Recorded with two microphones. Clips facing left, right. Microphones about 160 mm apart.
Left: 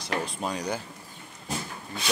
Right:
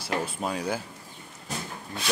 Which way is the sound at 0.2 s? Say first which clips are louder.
Right 1 dB; 5° right (ahead or behind).